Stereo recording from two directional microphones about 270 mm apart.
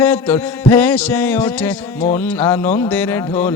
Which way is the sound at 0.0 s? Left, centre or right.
Centre.